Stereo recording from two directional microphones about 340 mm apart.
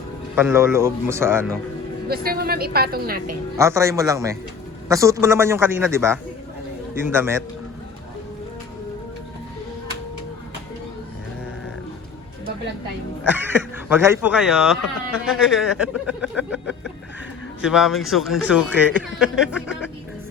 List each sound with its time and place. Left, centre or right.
0.3 s a man's voice: centre
2.0 s a woman's voice: right
3.6 s a man's voice: centre
13.2 s speech: centre